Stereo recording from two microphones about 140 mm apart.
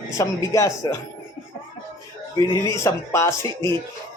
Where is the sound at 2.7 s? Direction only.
20° left (ahead or behind).